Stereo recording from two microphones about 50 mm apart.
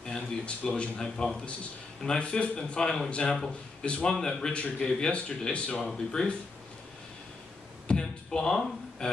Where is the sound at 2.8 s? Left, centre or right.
Centre.